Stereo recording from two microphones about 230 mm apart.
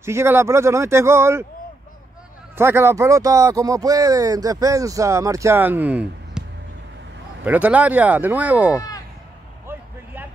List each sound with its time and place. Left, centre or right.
0.0 s speech: centre
2.5 s speech: centre
7.4 s speech: centre
8.7 s a sound: centre